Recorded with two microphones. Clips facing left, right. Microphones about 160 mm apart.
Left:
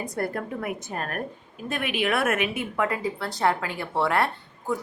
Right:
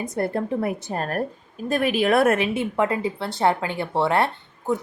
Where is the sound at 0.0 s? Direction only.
25° right (ahead or behind).